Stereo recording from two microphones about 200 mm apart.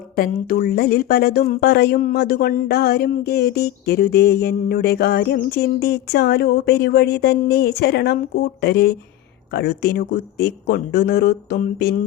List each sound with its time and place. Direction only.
0.2 s speech: 50° left (ahead or behind)